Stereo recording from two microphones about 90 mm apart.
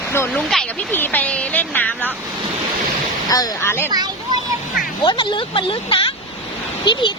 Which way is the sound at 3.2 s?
45° left (ahead or behind).